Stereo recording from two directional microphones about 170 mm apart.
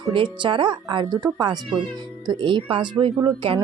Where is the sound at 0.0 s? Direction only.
30° right (ahead or behind).